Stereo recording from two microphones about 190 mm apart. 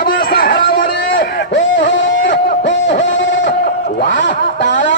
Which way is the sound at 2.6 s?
70° left (ahead or behind).